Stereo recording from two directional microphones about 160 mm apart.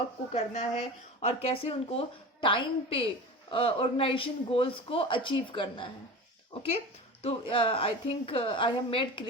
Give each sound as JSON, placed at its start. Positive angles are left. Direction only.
{"t": 0.3, "sound": "speech", "side_deg": 40}